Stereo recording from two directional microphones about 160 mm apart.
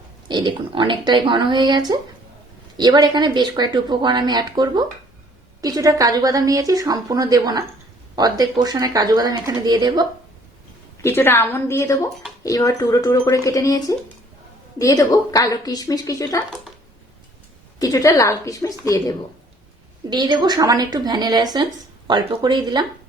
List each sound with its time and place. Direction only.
0.3 s a woman's voice: 30° right (ahead or behind)
11.0 s a woman's voice: 15° left (ahead or behind)
17.7 s a woman's voice: 20° left (ahead or behind)
20.1 s a woman's voice: 25° right (ahead or behind)